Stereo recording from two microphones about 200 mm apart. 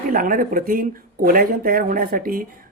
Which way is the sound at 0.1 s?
45° right (ahead or behind).